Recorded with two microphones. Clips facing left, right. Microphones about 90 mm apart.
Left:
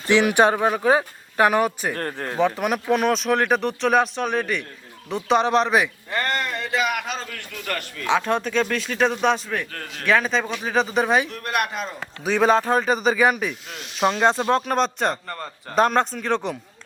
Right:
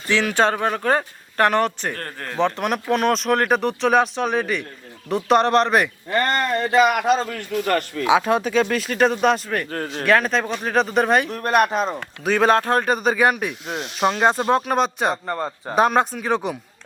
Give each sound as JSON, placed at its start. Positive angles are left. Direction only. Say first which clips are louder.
{"t": 0.1, "sound": "speech", "louder": "left 2 dB", "side_deg": 15}
{"t": 2.0, "sound": "speech", "louder": "left 4 dB", "side_deg": 20}
{"t": 2.4, "sound": "speech", "louder": "even", "side_deg": 5}
{"t": 6.2, "sound": "a man's voice", "louder": "right 5 dB", "side_deg": -40}
{"t": 8.0, "sound": "speech", "louder": "right 2 dB", "side_deg": -5}
{"t": 9.7, "sound": "speech", "louder": "right 8 dB", "side_deg": -35}
{"t": 10.1, "sound": "speech", "louder": "right 2 dB", "side_deg": 0}
{"t": 11.3, "sound": "speech", "louder": "right 7 dB", "side_deg": -35}
{"t": 12.2, "sound": "speech", "louder": "right 1 dB", "side_deg": 0}
{"t": 13.7, "sound": "a man's voice", "louder": "right 9 dB", "side_deg": -45}
{"t": 14.0, "sound": "speech", "louder": "right 1 dB", "side_deg": -5}
{"t": 15.1, "sound": "a man's voice", "louder": "right 7 dB", "side_deg": -25}
{"t": 15.7, "sound": "speech", "louder": "right 1 dB", "side_deg": -5}